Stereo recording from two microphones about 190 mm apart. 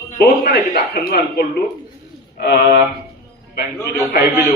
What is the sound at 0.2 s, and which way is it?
A man's voice, 55° left (ahead or behind).